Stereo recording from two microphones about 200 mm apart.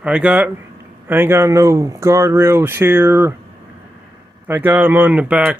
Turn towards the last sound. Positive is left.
turn(degrees=-5)  # may be behind; listen again after turning